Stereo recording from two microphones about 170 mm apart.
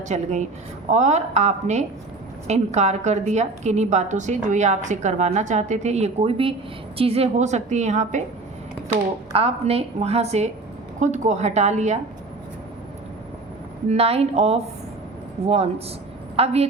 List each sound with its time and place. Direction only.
0.1 s a woman's voice: 45° right (ahead or behind)
9.3 s a woman's voice: 35° right (ahead or behind)
13.8 s a woman's voice: 35° right (ahead or behind)